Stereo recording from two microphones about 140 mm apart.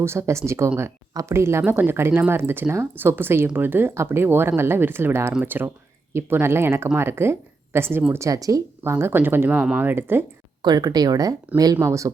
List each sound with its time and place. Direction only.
0.0 s speech: 20° right (ahead or behind)
10.6 s speech: 30° right (ahead or behind)